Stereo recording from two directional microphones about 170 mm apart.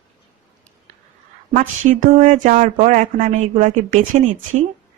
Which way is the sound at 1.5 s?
50° right (ahead or behind).